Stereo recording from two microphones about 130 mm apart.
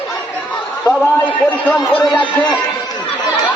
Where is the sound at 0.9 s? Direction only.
10° left (ahead or behind).